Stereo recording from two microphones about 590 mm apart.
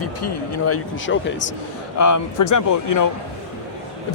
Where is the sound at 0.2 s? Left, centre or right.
Left.